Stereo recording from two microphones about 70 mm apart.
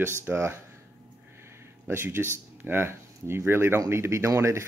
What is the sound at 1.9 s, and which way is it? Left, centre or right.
Speech, right.